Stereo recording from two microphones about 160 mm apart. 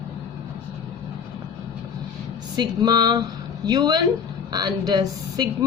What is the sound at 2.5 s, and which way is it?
Speech, 25° right (ahead or behind).